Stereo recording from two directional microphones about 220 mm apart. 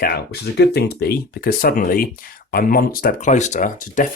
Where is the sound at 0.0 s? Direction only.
45° left (ahead or behind).